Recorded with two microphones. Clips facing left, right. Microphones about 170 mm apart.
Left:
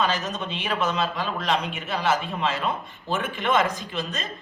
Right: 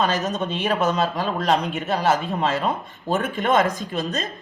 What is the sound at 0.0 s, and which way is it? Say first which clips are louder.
Speech: right 4 dB; 40° right (ahead or behind).